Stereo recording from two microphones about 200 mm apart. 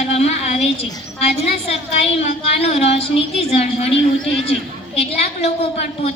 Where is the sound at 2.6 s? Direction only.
30° left (ahead or behind).